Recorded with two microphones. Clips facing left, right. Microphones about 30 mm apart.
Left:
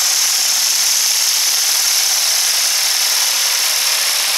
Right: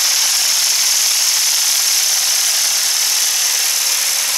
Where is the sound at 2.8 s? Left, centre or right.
Centre.